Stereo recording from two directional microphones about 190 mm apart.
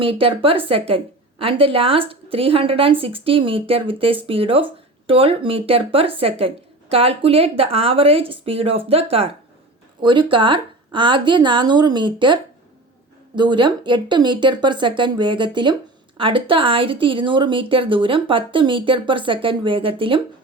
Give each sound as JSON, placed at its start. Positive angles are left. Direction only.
{"t": 0.0, "sound": "a woman's voice", "side_deg": -30}